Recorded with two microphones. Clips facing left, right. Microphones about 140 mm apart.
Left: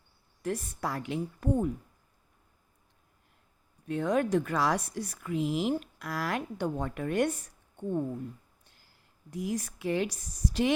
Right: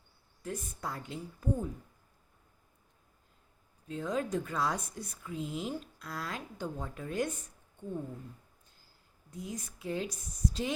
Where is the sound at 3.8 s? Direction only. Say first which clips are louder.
Left 6 dB; 70° left (ahead or behind).